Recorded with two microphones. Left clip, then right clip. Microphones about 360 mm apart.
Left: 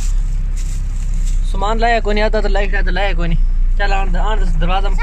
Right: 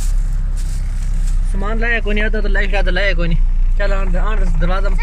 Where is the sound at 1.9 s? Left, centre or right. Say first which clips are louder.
Left 3 dB; left.